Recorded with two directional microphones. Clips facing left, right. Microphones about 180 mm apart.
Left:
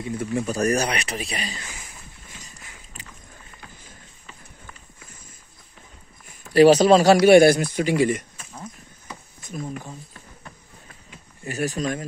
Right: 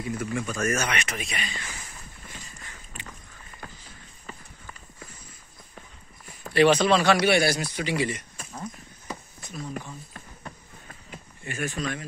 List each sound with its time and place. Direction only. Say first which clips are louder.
0.0 s speech: left 4 dB; 35° left (ahead or behind)
3.6 s a sound: right 5 dB; 45° right (ahead or behind)
6.5 s speech: left 6 dB; 40° left (ahead or behind)
9.5 s speech: left 4 dB; 50° left (ahead or behind)
11.4 s speech: left 5 dB; 40° left (ahead or behind)